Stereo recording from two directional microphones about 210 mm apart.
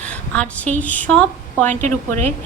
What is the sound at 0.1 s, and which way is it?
A woman's voice, 5° left (ahead or behind).